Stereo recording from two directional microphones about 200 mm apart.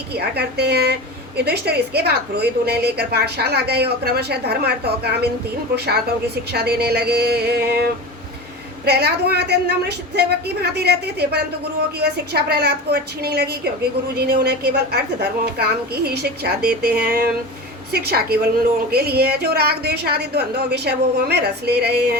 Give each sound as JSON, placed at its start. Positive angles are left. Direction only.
{"t": 0.1, "sound": "a woman's voice", "side_deg": -55}